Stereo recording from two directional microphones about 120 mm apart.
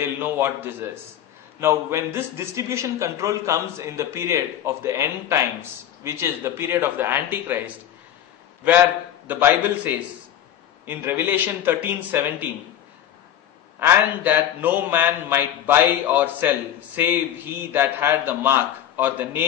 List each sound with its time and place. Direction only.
0.0 s a man's voice: 15° right (ahead or behind)
9.3 s a man's voice: 15° right (ahead or behind)
13.7 s a man's voice: 15° right (ahead or behind)